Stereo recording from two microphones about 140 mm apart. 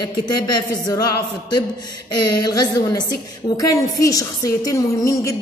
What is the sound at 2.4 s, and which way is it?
A woman's voice, 30° left (ahead or behind).